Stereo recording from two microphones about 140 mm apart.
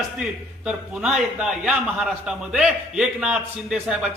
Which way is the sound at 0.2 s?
5° right (ahead or behind).